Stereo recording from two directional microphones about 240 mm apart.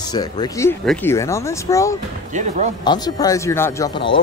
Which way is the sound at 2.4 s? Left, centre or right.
Right.